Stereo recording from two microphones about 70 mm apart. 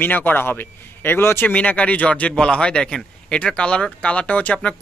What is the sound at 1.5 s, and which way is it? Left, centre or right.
A man's voice, centre.